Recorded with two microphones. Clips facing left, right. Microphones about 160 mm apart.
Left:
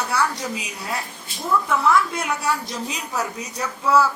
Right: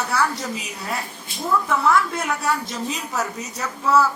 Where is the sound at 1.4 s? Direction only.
Centre (ahead or behind).